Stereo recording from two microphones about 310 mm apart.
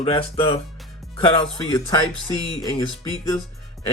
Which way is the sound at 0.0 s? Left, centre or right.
Centre.